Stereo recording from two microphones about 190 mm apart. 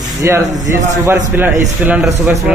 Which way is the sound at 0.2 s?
15° right (ahead or behind).